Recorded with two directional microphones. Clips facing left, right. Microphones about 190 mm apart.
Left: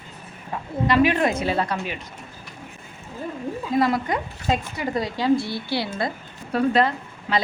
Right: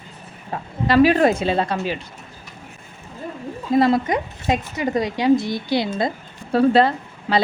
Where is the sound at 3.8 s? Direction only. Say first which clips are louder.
Right 5 dB; 25° right (ahead or behind).